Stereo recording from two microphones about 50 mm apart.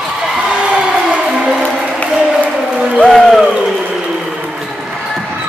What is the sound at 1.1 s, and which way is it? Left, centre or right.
Music, centre.